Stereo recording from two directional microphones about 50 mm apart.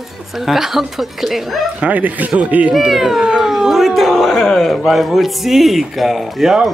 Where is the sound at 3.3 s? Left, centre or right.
Centre.